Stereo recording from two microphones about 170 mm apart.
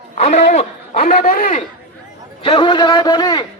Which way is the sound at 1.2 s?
55° left (ahead or behind).